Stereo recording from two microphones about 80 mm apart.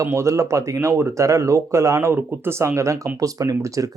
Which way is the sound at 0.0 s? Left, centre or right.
Right.